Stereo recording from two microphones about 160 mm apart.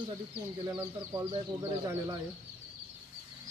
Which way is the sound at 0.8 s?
15° right (ahead or behind).